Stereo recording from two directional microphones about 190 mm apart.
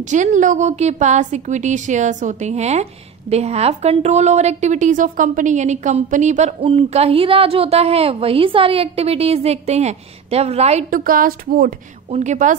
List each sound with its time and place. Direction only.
0.0 s a woman's voice: 40° right (ahead or behind)
12.1 s a woman's voice: 40° right (ahead or behind)